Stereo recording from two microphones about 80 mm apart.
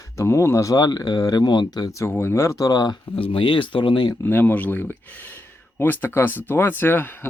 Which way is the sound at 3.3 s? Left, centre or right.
Left.